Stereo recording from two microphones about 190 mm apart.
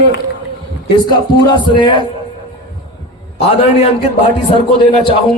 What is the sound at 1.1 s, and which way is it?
Speech, 25° left (ahead or behind).